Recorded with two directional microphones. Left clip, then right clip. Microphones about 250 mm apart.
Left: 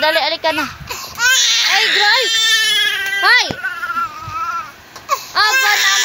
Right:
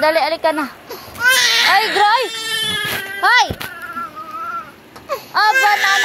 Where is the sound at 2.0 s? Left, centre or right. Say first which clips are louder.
Even; left.